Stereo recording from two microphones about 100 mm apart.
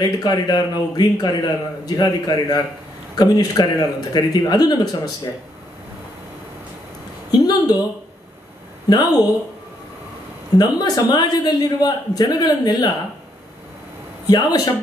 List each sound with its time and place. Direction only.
0.0 s a man's voice: 40° left (ahead or behind)
7.2 s a woman's voice: 40° left (ahead or behind)
8.8 s a man's voice: 40° left (ahead or behind)
10.5 s a man's voice: 40° left (ahead or behind)
14.2 s speech: 40° left (ahead or behind)